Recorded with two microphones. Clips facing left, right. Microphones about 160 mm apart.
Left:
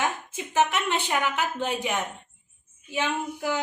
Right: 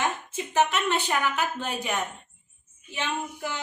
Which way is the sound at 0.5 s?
15° left (ahead or behind).